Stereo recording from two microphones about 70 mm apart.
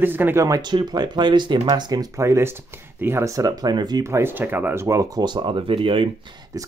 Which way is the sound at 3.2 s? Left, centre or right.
Right.